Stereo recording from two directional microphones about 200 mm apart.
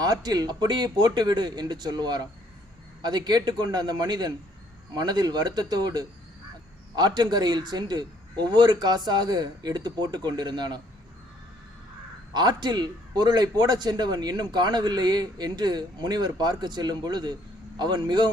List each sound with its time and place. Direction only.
0.0 s a man's voice: 20° right (ahead or behind)
12.3 s a man's voice: 20° right (ahead or behind)